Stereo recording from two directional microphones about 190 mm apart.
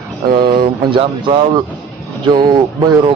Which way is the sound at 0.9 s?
25° right (ahead or behind).